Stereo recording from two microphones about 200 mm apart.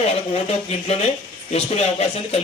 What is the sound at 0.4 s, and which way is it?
Speech, 30° left (ahead or behind).